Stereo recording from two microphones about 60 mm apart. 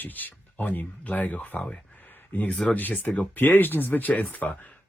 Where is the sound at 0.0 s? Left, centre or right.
Left.